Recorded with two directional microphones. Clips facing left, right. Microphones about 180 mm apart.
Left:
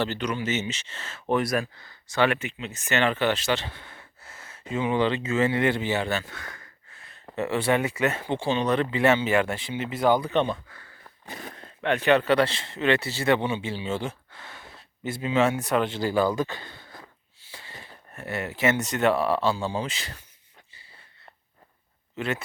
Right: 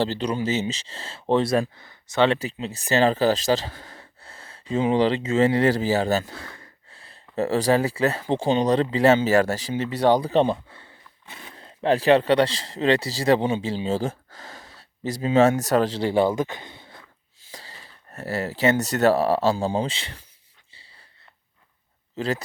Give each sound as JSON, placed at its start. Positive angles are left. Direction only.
{"t": 0.0, "sound": "speech", "side_deg": -30}
{"t": 2.4, "sound": "speech", "side_deg": -35}
{"t": 11.3, "sound": "speech", "side_deg": 45}
{"t": 11.5, "sound": "speech", "side_deg": -30}
{"t": 17.4, "sound": "a sound", "side_deg": -35}
{"t": 18.1, "sound": "speech", "side_deg": -35}
{"t": 22.1, "sound": "speech", "side_deg": -35}